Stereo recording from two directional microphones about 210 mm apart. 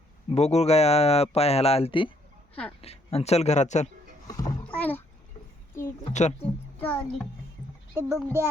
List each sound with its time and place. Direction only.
0.3 s speech: 30° left (ahead or behind)
4.3 s speech: 15° left (ahead or behind)
4.6 s rowboat: 5° left (ahead or behind)
6.1 s speech: 30° left (ahead or behind)
6.7 s a child's voice: 5° left (ahead or behind)
7.9 s speech: 10° right (ahead or behind)